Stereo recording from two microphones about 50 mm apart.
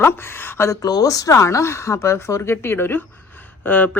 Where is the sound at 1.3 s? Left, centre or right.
Left.